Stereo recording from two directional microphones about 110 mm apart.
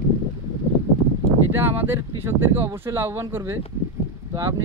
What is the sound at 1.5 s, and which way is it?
Speech, 20° right (ahead or behind).